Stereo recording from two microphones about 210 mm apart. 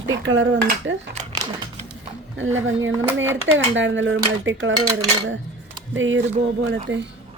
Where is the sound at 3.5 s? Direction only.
65° right (ahead or behind).